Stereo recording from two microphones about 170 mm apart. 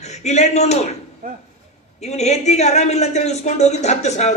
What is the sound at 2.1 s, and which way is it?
Speech, 40° left (ahead or behind).